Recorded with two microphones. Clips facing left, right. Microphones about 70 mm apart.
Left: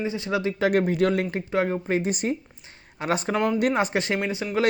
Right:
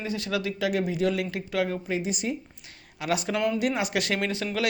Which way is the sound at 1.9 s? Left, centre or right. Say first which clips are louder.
Left 4 dB; left.